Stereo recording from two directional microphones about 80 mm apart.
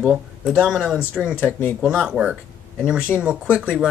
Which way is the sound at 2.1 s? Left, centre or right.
Centre.